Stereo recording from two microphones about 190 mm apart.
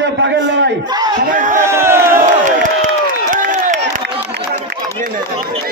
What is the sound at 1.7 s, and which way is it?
Crowd, 15° right (ahead or behind).